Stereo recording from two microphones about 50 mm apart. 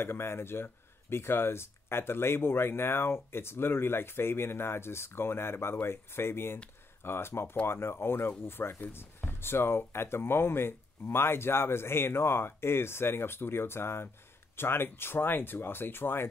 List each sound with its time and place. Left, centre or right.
0.0 s speech: left